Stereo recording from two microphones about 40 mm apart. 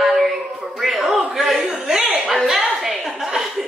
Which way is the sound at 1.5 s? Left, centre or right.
Centre.